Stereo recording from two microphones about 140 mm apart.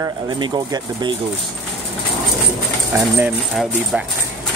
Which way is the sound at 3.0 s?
15° right (ahead or behind).